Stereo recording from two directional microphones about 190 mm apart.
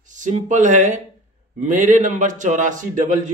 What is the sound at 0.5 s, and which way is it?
A man's voice, 40° right (ahead or behind).